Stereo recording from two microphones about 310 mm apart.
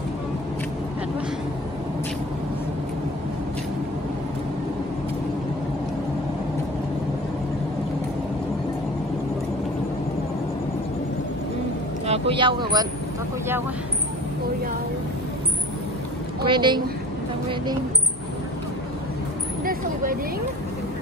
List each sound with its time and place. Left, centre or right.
12.1 s speech: centre
16.4 s a woman's voice: centre
19.6 s a sound: right